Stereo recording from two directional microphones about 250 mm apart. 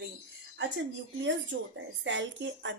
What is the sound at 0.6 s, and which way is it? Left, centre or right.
A woman's voice, right.